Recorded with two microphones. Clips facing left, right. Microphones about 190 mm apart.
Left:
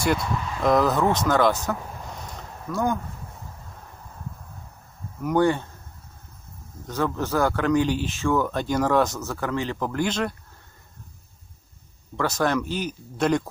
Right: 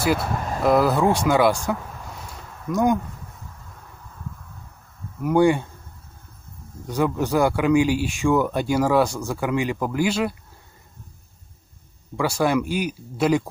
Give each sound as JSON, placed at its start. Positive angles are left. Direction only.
{"t": 0.2, "sound": "speech", "side_deg": -50}
{"t": 0.6, "sound": "speech", "side_deg": -10}
{"t": 5.2, "sound": "speech", "side_deg": -10}
{"t": 6.9, "sound": "speech", "side_deg": -15}
{"t": 12.2, "sound": "speech", "side_deg": -10}